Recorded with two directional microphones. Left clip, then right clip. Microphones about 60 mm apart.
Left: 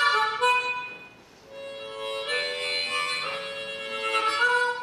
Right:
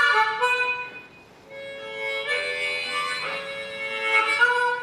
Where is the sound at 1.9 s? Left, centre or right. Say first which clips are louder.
Right 4 dB; left.